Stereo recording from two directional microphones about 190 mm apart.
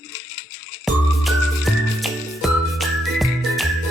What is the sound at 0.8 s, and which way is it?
Music, centre (ahead or behind).